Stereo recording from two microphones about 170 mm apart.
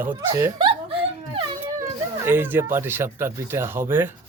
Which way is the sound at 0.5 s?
30° right (ahead or behind).